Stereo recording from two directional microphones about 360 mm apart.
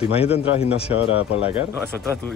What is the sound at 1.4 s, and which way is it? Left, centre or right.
Speech, centre.